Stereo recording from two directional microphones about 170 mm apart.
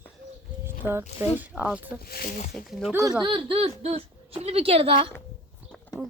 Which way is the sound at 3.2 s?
30° right (ahead or behind).